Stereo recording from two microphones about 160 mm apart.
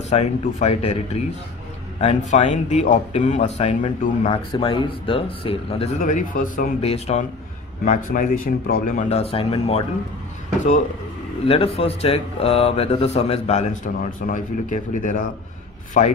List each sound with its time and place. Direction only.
0.1 s speech: 40° left (ahead or behind)
4.3 s speech: 35° left (ahead or behind)
6.0 s speech: 55° left (ahead or behind)
6.8 s speech: 40° left (ahead or behind)
7.8 s speech: 55° left (ahead or behind)
9.1 s speech: 35° left (ahead or behind)
11.4 s speech: 40° left (ahead or behind)